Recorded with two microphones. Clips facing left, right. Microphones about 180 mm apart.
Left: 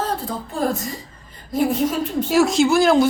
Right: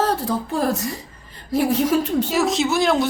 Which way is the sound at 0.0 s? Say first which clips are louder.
Right 4 dB; 75° right (ahead or behind).